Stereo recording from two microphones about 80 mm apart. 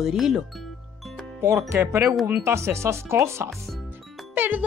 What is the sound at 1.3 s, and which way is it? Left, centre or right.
Speech, right.